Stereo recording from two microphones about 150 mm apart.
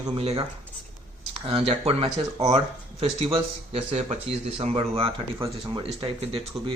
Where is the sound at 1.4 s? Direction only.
40° right (ahead or behind).